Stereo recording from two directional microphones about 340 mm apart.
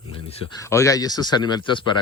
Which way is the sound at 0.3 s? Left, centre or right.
Centre.